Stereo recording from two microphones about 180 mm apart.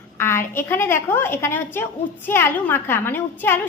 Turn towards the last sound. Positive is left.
turn(degrees=10)  # may be behind; listen again after turning